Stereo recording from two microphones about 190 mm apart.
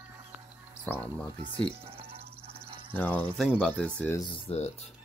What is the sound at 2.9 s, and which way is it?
Speech, 10° left (ahead or behind).